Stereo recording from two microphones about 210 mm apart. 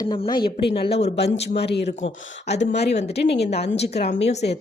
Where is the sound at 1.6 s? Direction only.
50° left (ahead or behind).